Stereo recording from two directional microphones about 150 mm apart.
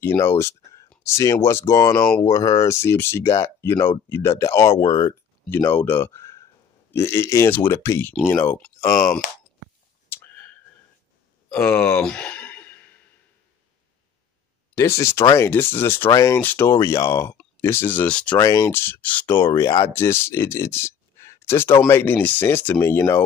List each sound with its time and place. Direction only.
0.0 s speech: 15° left (ahead or behind)
10.0 s clicking: 15° left (ahead or behind)
11.5 s speech: 15° left (ahead or behind)
12.0 s a sound: 5° left (ahead or behind)
14.8 s speech: 20° left (ahead or behind)
18.4 s speech: 20° left (ahead or behind)